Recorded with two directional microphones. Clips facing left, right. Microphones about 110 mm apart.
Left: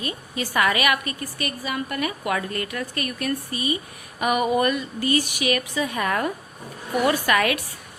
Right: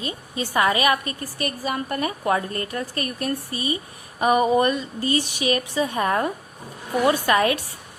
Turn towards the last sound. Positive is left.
turn(degrees=-30)  # may be behind; listen again after turning